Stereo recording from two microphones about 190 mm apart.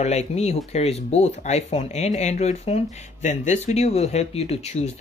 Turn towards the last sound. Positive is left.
turn(degrees=35)  # may be behind; listen again after turning